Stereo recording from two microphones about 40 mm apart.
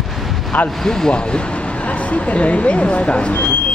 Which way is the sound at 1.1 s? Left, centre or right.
Left.